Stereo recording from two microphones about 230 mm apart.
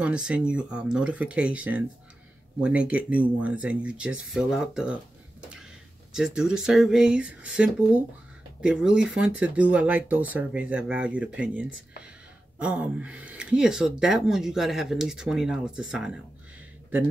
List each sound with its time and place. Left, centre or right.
0.0 s speech: centre
5.4 s a sound: centre
6.1 s speech: centre